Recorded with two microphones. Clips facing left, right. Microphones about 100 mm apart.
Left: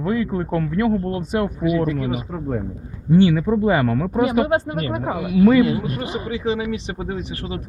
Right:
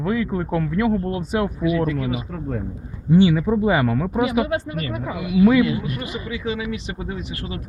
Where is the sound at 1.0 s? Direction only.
35° left (ahead or behind).